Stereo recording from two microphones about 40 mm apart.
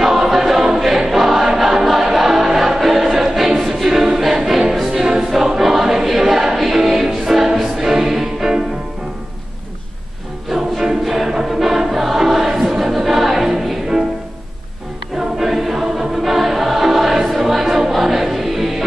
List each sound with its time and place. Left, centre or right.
0.0 s choir: centre
5.3 s music: centre
10.5 s choir: centre
15.3 s choir: centre
17.4 s music: centre